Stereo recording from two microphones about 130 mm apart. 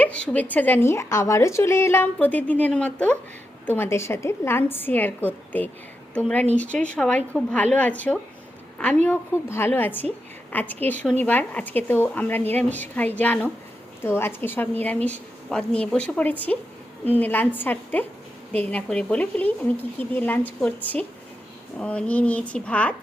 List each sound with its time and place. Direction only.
0.0 s a woman's voice: 10° left (ahead or behind)